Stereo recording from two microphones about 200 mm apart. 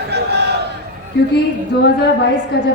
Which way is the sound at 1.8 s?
60° left (ahead or behind).